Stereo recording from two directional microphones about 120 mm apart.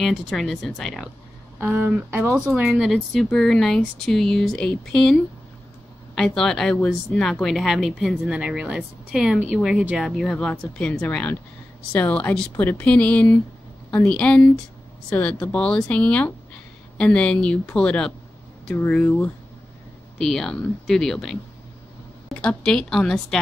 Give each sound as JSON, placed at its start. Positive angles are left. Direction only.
{"t": 0.0, "sound": "speech", "side_deg": 0}
{"t": 1.6, "sound": "speech", "side_deg": -20}
{"t": 2.3, "sound": "speech", "side_deg": -5}
{"t": 6.1, "sound": "speech", "side_deg": 5}
{"t": 19.0, "sound": "speech", "side_deg": 20}
{"t": 20.2, "sound": "speech", "side_deg": 5}
{"t": 22.4, "sound": "speech", "side_deg": 5}